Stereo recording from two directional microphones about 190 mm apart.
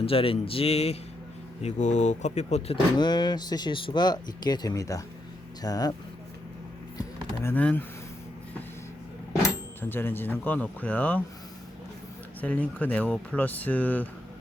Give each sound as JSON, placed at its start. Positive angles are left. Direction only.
{"t": 0.0, "sound": "speech", "side_deg": 30}
{"t": 7.4, "sound": "speech", "side_deg": 5}
{"t": 9.8, "sound": "speech", "side_deg": 10}
{"t": 12.4, "sound": "speech", "side_deg": 10}